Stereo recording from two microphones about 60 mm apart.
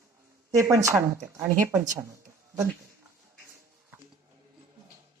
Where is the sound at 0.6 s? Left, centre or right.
Right.